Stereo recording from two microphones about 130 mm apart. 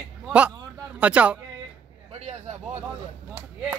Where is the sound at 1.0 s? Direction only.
10° right (ahead or behind).